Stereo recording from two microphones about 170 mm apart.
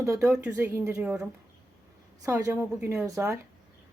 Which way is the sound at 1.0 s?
5° right (ahead or behind).